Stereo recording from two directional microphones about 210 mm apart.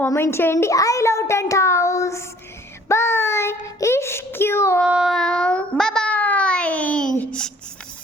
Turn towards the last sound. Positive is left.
turn(degrees=5)  # may be behind; listen again after turning